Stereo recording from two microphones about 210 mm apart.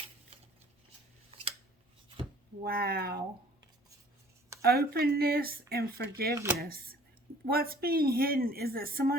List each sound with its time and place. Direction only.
2.6 s speech: 45° right (ahead or behind)
4.6 s speech: 45° right (ahead or behind)
6.3 s speech: 10° right (ahead or behind)
6.6 s speech: 45° right (ahead or behind)